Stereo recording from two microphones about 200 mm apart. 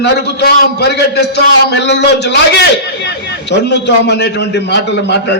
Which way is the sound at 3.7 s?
60° left (ahead or behind).